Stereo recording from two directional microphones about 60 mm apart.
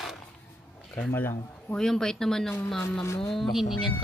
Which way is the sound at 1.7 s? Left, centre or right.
Centre.